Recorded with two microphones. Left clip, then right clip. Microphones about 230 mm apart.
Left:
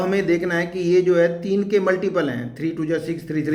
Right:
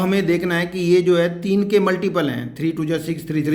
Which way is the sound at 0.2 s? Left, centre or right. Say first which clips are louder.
Right 1 dB; right.